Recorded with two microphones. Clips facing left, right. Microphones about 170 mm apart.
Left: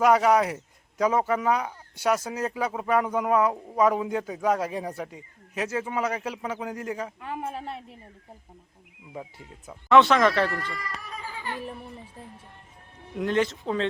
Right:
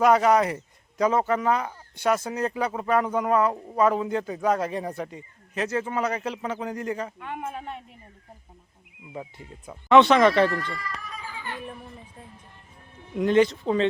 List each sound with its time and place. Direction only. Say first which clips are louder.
0.0 s a man's voice: right 1 dB; 5° left (ahead or behind)
7.5 s a woman's voice: left 1 dB; 35° left (ahead or behind)
9.1 s speech: right 2 dB; centre (ahead or behind)
13.1 s speech: right 5 dB; centre (ahead or behind)